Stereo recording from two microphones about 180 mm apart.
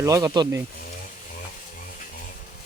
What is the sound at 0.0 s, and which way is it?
Speech, 15° right (ahead or behind).